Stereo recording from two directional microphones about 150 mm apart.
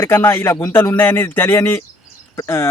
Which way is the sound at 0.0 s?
15° left (ahead or behind).